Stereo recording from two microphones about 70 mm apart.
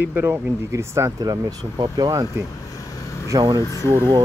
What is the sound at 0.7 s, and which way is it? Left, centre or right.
Speech, right.